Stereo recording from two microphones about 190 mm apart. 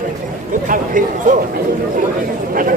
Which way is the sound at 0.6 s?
45° right (ahead or behind).